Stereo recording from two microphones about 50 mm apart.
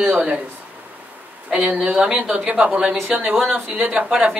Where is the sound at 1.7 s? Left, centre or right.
Centre.